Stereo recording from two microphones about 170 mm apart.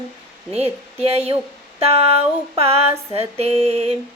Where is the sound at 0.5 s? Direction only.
35° right (ahead or behind).